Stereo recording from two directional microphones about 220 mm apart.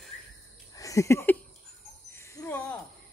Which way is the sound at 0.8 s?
15° left (ahead or behind).